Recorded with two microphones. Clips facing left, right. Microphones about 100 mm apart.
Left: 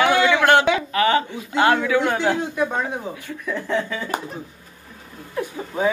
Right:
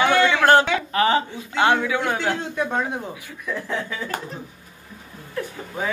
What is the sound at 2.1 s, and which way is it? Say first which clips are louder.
Speech: left 3 dB; 15° left (ahead or behind).